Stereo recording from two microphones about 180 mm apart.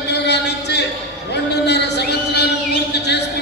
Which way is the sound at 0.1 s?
70° left (ahead or behind).